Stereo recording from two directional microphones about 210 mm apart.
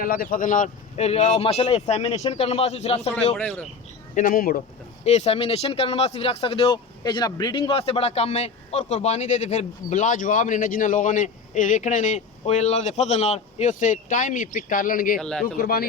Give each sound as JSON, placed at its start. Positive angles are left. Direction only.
{"t": 0.0, "sound": "speech", "side_deg": 40}
{"t": 3.3, "sound": "speech", "side_deg": 5}
{"t": 4.1, "sound": "speech", "side_deg": 40}
{"t": 5.0, "sound": "speech", "side_deg": 30}
{"t": 15.2, "sound": "a man's voice", "side_deg": 5}
{"t": 15.5, "sound": "speech", "side_deg": 45}